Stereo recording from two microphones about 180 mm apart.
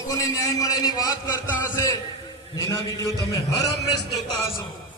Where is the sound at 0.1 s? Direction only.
20° left (ahead or behind).